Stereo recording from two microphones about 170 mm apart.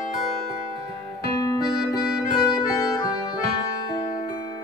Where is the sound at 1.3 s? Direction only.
20° left (ahead or behind).